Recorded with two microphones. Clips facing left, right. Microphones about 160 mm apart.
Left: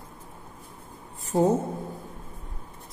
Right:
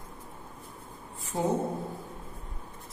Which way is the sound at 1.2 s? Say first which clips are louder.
Left 8 dB; 45° left (ahead or behind).